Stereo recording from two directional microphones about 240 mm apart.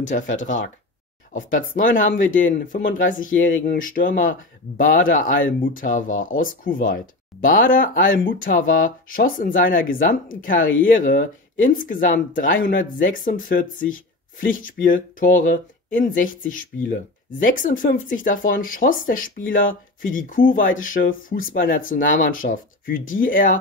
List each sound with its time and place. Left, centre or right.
0.4 s speech: left
1.8 s speech: left